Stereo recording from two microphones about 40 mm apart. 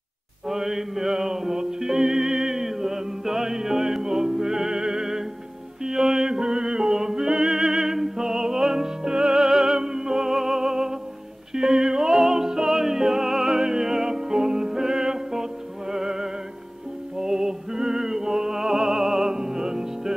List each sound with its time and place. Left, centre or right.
0.5 s music: centre
9.3 s music: centre